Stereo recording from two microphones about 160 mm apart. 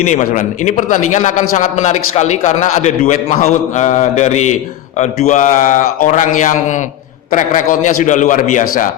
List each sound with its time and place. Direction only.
0.0 s a man's voice: 50° left (ahead or behind)